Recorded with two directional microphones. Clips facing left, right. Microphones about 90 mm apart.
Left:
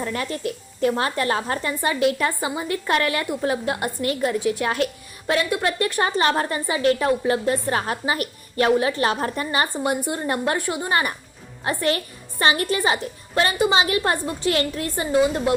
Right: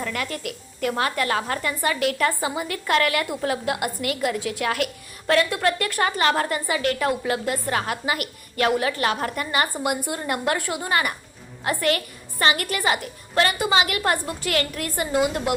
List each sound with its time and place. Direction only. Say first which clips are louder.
0.0 s a woman's voice: left 2 dB; 30° left (ahead or behind)